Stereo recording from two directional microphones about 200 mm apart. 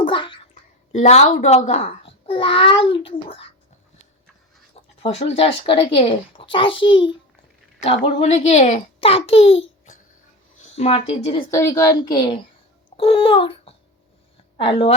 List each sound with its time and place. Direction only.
0.0 s a sound: 25° left (ahead or behind)
0.9 s a child's voice: 35° left (ahead or behind)
5.0 s a child's voice: 30° left (ahead or behind)
10.6 s speech: 30° left (ahead or behind)
11.5 s a woman's voice: 15° left (ahead or behind)